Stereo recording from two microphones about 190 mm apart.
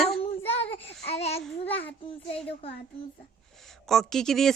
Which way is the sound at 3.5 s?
Centre (ahead or behind).